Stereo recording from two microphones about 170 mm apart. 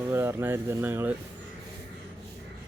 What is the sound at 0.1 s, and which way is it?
Speech, 15° right (ahead or behind).